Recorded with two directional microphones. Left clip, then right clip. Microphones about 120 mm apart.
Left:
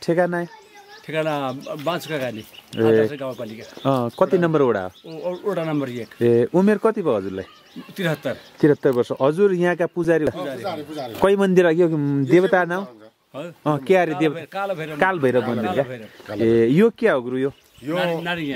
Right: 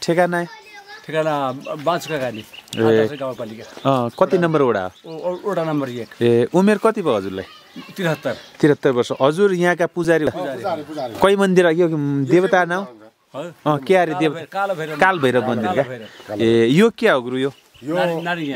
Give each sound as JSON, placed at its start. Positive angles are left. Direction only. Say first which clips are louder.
{"t": 0.0, "sound": "speech", "louder": "right 3 dB", "side_deg": -15}
{"t": 1.0, "sound": "a man's voice", "louder": "right 3 dB", "side_deg": 0}
{"t": 1.9, "sound": "a man's voice", "louder": "right 4 dB", "side_deg": -5}
{"t": 3.3, "sound": "speech", "louder": "right 3 dB", "side_deg": 10}
{"t": 3.8, "sound": "a man's voice", "louder": "right 2 dB", "side_deg": -5}
{"t": 5.1, "sound": "speech", "louder": "right 2 dB", "side_deg": 5}
{"t": 7.9, "sound": "speech", "louder": "right 3 dB", "side_deg": 0}
{"t": 11.1, "sound": "a man's voice", "louder": "right 2 dB", "side_deg": -10}
{"t": 17.9, "sound": "speech", "louder": "right 3 dB", "side_deg": 20}